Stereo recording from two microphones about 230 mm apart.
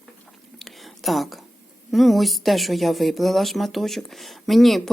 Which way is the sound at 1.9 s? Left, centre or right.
Centre.